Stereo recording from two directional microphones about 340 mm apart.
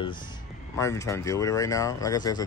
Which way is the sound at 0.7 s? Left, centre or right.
Centre.